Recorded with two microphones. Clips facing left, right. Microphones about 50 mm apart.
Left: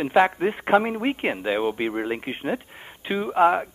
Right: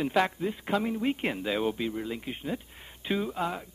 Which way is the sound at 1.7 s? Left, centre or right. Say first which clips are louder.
Left 7 dB; left.